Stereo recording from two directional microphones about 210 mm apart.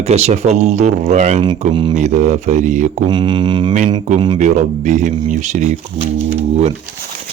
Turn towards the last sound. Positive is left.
turn(degrees=-30)  # may be behind; listen again after turning